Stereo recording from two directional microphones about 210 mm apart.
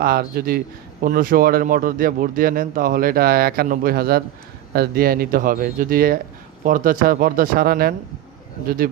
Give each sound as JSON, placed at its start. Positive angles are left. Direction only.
{"t": 0.0, "sound": "speech", "side_deg": -45}